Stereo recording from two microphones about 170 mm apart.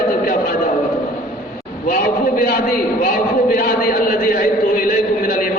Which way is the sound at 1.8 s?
60° left (ahead or behind).